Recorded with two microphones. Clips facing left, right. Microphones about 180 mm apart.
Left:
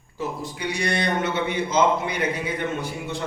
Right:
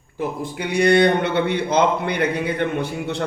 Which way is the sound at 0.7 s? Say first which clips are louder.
Right 10 dB; 60° right (ahead or behind).